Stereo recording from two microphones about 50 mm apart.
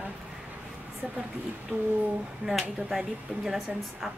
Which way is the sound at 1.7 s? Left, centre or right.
Right.